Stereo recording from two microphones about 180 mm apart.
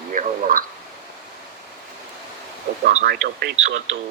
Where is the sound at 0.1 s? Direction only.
50° right (ahead or behind).